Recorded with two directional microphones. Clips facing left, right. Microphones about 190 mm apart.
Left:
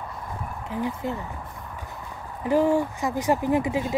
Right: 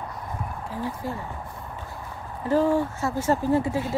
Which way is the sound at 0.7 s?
20° left (ahead or behind).